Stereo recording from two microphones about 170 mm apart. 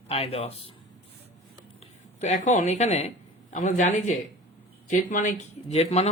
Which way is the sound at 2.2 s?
45° left (ahead or behind).